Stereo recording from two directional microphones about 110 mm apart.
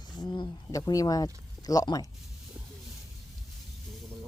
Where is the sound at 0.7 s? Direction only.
30° left (ahead or behind).